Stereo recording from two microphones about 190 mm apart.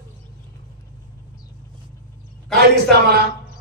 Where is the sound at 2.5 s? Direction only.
60° right (ahead or behind).